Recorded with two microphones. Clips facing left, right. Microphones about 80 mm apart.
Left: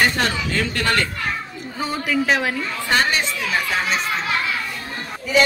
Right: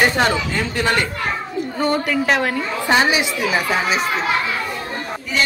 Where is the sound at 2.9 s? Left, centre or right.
Centre.